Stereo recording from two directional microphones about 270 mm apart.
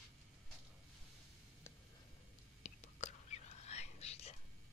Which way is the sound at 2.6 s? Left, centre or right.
Left.